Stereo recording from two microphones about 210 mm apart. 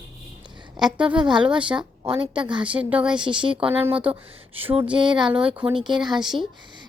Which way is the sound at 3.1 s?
20° right (ahead or behind).